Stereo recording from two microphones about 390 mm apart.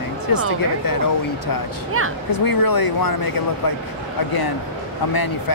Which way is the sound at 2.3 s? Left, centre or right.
Left.